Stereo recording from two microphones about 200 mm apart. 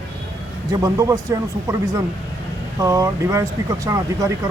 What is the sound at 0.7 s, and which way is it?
Speech, 15° right (ahead or behind).